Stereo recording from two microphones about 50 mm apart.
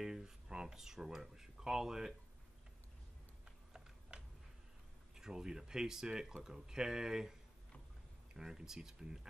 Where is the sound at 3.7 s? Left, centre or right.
Centre.